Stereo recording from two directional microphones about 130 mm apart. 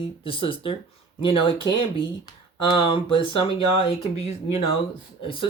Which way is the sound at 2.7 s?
40° left (ahead or behind).